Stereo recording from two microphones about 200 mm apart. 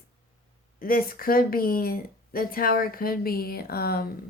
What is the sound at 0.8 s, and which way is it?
Speech, 45° left (ahead or behind).